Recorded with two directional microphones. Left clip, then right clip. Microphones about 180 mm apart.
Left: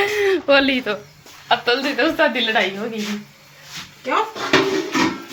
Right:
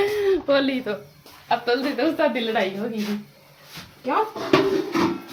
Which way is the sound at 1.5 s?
Centre (ahead or behind).